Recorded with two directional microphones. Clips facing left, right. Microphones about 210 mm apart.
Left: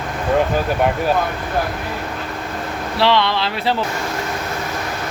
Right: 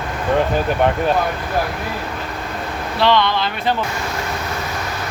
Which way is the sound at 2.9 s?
25° left (ahead or behind).